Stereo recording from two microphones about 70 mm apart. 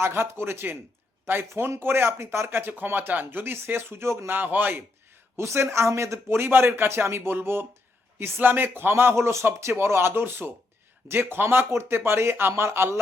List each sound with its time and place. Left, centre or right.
0.0 s a man's voice: right
4.3 s a man's voice: right